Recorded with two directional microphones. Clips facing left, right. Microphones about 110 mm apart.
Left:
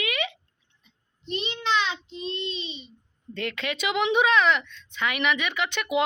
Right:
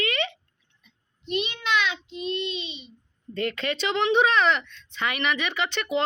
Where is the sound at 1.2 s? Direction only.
30° left (ahead or behind).